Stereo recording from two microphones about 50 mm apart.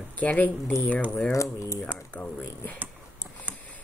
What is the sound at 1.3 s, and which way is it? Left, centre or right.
Speech, left.